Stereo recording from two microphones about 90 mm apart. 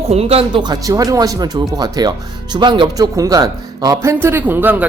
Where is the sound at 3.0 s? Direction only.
45° right (ahead or behind).